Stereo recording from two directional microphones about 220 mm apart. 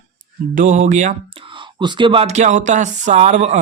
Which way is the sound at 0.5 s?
35° right (ahead or behind).